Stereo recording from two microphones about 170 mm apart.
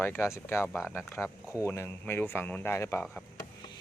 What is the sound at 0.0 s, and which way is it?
Speech, 15° left (ahead or behind).